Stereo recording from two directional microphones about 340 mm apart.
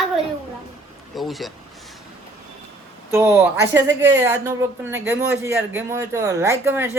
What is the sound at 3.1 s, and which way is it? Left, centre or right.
Speech, centre.